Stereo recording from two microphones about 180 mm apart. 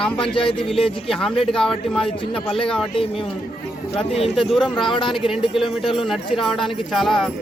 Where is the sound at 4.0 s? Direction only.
35° left (ahead or behind).